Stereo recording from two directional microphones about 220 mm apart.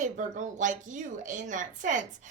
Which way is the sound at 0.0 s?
35° right (ahead or behind).